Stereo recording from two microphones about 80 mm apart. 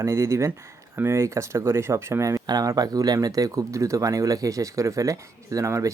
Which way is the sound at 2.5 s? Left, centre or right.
Right.